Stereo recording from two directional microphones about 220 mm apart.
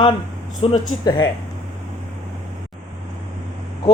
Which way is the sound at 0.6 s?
25° left (ahead or behind).